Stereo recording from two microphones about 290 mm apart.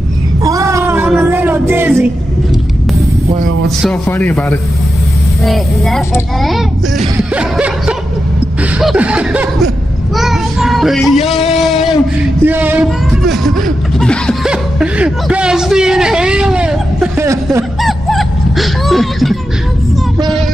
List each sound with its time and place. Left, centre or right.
0.4 s a sound: centre
3.6 s speech: centre
10.1 s child singing: centre
11.1 s a man's voice: left
11.5 s speech: centre